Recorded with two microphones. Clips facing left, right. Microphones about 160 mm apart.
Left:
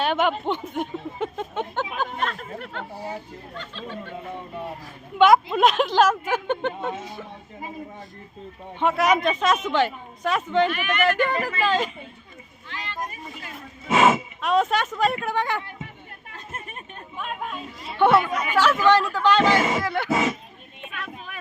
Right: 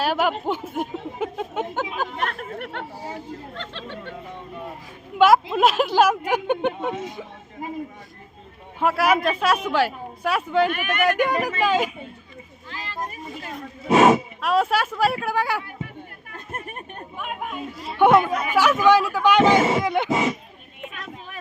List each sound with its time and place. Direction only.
0.0 s speech: 5° right (ahead or behind)
2.1 s speech: 60° right (ahead or behind)
3.5 s speech: 75° right (ahead or behind)
5.1 s speech: 5° right (ahead or behind)
8.8 s speech: 5° right (ahead or behind)
10.7 s speech: 50° right (ahead or behind)
11.0 s speech: 10° right (ahead or behind)
12.7 s speech: 35° right (ahead or behind)
14.4 s speech: 5° right (ahead or behind)
16.3 s chatter: 55° right (ahead or behind)
17.2 s speech: 10° right (ahead or behind)
20.9 s vehicle: 35° right (ahead or behind)